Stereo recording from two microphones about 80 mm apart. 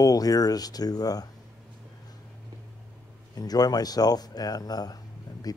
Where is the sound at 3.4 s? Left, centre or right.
Left.